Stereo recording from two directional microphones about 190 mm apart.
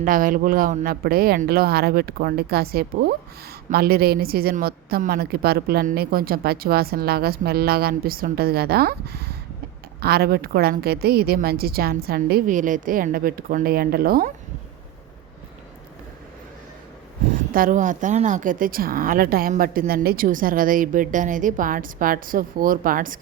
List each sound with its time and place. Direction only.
0.0 s a woman's voice: 45° right (ahead or behind)
17.5 s a woman's voice: 45° right (ahead or behind)